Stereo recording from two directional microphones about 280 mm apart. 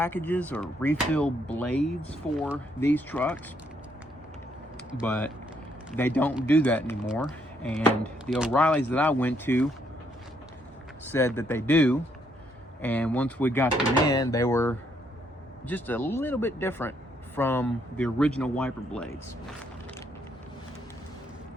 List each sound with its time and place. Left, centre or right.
0.0 s speech: centre
4.9 s speech: centre
6.0 s speech: centre
11.0 s speech: centre